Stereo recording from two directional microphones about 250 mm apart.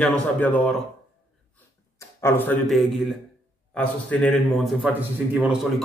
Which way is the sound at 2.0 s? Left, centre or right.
Centre.